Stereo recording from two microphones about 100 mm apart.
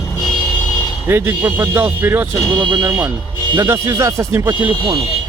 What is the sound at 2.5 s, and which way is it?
Speech, 45° right (ahead or behind).